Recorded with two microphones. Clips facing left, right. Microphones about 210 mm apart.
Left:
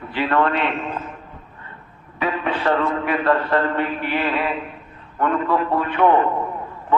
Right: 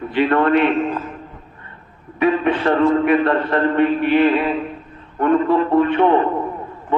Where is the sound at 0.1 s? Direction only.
20° right (ahead or behind).